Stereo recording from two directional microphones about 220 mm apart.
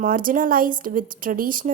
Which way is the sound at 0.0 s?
40° right (ahead or behind).